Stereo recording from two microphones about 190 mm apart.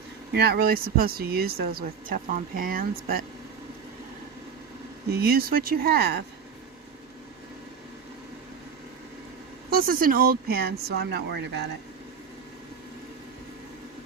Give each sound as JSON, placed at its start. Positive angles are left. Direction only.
{"t": 0.3, "sound": "speech", "side_deg": -60}
{"t": 5.1, "sound": "speech", "side_deg": -55}
{"t": 9.7, "sound": "speech", "side_deg": -50}